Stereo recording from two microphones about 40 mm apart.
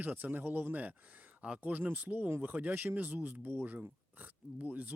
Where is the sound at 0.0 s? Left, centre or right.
Right.